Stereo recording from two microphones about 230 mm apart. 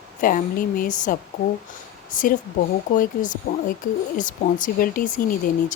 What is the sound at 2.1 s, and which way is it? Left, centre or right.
Speech, left.